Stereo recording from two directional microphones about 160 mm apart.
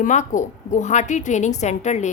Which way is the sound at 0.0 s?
50° left (ahead or behind).